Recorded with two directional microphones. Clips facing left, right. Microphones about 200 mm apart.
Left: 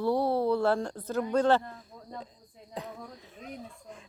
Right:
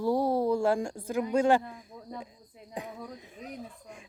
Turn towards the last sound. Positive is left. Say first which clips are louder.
# right 1 dB
turn(degrees=-10)  # may be behind; listen again after turning